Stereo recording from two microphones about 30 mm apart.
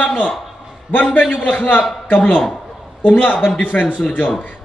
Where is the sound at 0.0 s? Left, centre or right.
Left.